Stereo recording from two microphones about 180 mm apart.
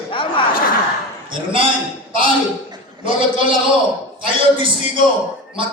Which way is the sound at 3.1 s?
30° right (ahead or behind).